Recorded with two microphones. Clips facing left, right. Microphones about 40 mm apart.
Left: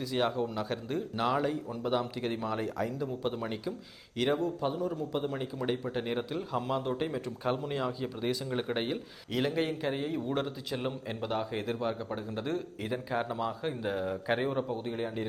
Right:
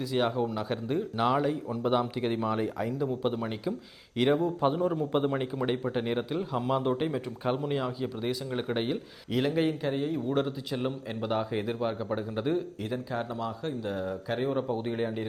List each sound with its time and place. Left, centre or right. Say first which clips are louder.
0.0 s a man's voice: right 2 dB; centre
4.6 s a man's voice: right 5 dB; right; by 12.6 s centre
12.8 s speech: even; centre
14.7 s a man's voice: right 4 dB; centre